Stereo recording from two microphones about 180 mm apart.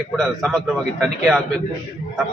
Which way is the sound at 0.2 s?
Centre (ahead or behind).